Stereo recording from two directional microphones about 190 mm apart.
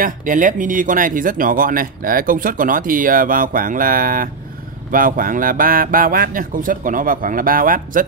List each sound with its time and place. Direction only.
0.0 s speech: 45° right (ahead or behind)